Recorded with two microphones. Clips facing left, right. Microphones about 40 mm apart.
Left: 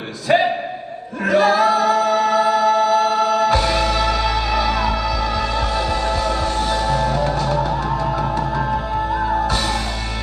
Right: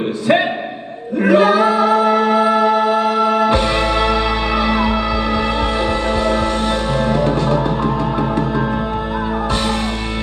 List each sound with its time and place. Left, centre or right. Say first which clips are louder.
1.2 s choir: right 3 dB; right
4.5 s music: right 4 dB; right
6.7 s music: right 2 dB; right